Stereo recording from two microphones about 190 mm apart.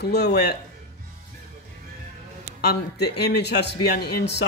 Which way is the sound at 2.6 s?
60° left (ahead or behind).